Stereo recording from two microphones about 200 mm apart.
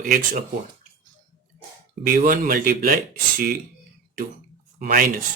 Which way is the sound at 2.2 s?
45° right (ahead or behind).